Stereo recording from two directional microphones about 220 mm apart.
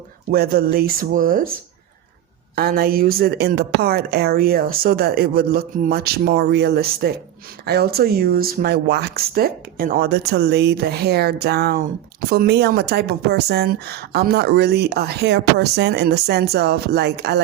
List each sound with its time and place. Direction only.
0.3 s speech: 40° right (ahead or behind)
2.6 s speech: 45° right (ahead or behind)